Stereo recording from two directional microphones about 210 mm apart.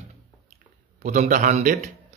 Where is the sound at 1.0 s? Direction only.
40° right (ahead or behind).